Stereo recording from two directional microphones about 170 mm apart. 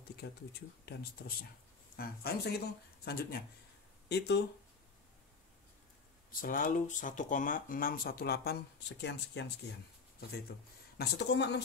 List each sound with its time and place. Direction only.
0.2 s speech: 70° left (ahead or behind)
4.1 s speech: 80° left
6.4 s speech: 55° left (ahead or behind); by 9.8 s 90° left
11.0 s a woman's voice: 90° left